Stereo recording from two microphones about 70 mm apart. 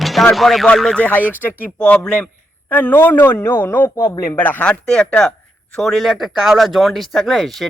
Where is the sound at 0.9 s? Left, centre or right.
Left.